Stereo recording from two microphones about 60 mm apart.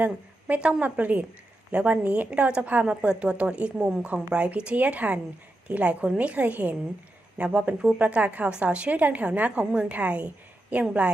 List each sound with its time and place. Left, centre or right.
0.0 s a woman's voice: right